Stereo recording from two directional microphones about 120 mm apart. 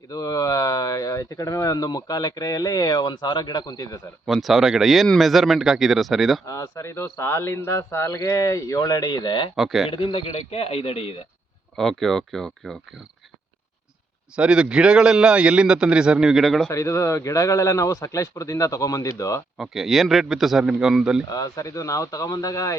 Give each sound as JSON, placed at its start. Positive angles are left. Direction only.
{"t": 0.1, "sound": "speech", "side_deg": 30}
{"t": 4.3, "sound": "speech", "side_deg": 0}
{"t": 6.4, "sound": "speech", "side_deg": 25}
{"t": 9.6, "sound": "speech", "side_deg": 0}
{"t": 9.9, "sound": "a man's voice", "side_deg": 45}
{"t": 11.8, "sound": "speech", "side_deg": 5}
{"t": 14.3, "sound": "a man's voice", "side_deg": -5}
{"t": 16.6, "sound": "speech", "side_deg": 25}
{"t": 19.5, "sound": "speech", "side_deg": -5}
{"t": 21.2, "sound": "speech", "side_deg": 30}